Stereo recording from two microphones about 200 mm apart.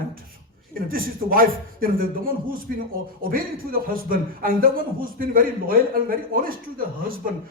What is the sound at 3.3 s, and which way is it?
A man's voice, 45° right (ahead or behind).